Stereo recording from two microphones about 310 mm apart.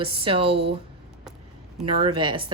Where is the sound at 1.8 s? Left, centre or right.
Centre.